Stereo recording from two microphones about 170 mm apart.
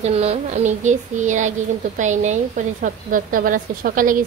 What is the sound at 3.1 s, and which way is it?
A woman's voice, 55° right (ahead or behind).